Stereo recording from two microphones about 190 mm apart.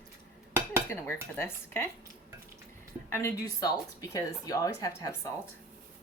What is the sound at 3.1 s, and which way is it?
A woman's voice, 15° left (ahead or behind).